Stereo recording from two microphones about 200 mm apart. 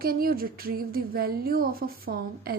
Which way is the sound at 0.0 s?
50° right (ahead or behind).